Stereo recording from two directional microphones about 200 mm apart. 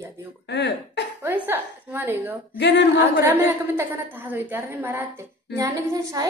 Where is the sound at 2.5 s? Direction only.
60° left (ahead or behind).